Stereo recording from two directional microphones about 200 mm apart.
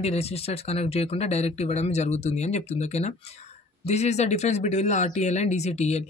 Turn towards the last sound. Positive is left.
turn(degrees=35)  # may be behind; listen again after turning